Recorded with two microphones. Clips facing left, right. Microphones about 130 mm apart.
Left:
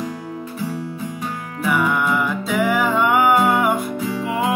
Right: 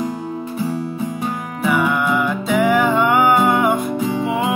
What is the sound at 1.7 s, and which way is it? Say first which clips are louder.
Music: right 2 dB; centre (ahead or behind).